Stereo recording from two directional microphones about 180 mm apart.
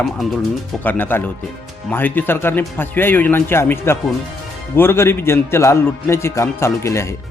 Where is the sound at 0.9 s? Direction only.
10° left (ahead or behind).